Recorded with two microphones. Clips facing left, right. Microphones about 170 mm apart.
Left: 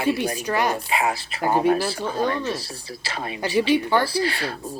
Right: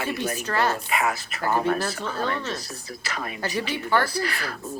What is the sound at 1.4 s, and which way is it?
Speech, 15° left (ahead or behind).